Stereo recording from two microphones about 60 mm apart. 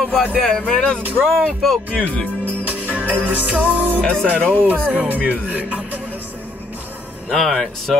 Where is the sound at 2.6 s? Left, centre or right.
Right.